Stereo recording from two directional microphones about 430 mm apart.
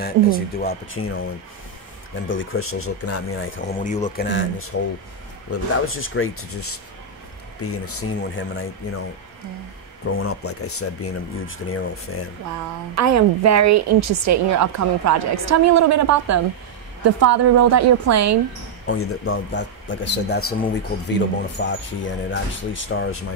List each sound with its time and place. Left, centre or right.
0.0 s speech: left
3.8 s speech: centre
10.1 s speech: left
12.9 s a woman's voice: right
18.9 s speech: left